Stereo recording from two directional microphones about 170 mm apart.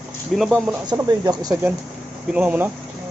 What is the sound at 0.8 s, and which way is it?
Speech, 20° right (ahead or behind).